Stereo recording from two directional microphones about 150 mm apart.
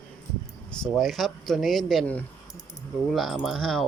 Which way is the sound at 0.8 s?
Centre (ahead or behind).